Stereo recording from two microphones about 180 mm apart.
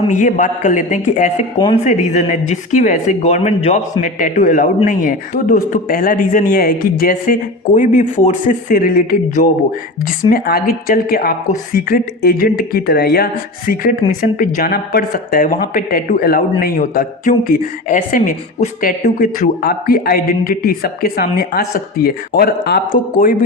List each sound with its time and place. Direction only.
0.1 s a woman's voice: 45° left (ahead or behind)